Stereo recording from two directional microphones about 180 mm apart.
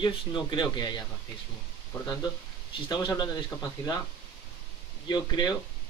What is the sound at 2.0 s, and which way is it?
A man's voice, 20° left (ahead or behind).